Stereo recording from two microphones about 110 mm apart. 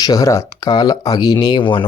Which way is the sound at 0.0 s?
35° left (ahead or behind).